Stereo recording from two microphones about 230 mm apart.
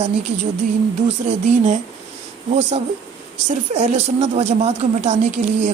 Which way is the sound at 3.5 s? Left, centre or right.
Right.